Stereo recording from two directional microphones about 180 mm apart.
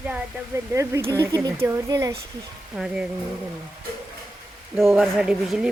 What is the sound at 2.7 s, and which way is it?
Speech, 5° right (ahead or behind).